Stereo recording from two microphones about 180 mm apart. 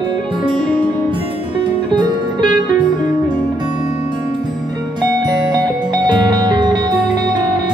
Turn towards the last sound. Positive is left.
turn(degrees=-25)  # may be behind; listen again after turning